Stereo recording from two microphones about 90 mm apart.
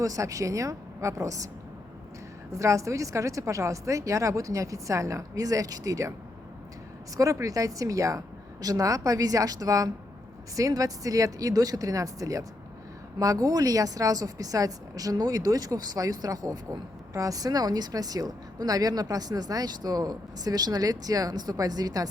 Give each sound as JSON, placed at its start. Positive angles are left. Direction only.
{"t": 0.0, "sound": "a woman's voice", "side_deg": -40}
{"t": 2.6, "sound": "a woman's voice", "side_deg": -35}
{"t": 7.2, "sound": "a woman's voice", "side_deg": -40}